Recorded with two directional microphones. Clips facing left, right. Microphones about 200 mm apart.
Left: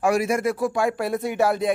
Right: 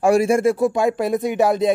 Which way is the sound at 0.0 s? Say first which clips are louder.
Right 6 dB; 30° right (ahead or behind).